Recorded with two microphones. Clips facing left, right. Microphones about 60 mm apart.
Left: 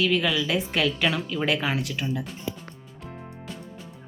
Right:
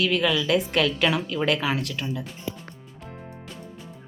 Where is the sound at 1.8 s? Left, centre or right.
Centre.